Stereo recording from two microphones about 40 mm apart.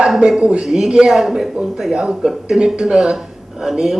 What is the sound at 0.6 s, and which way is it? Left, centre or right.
A man's voice, centre.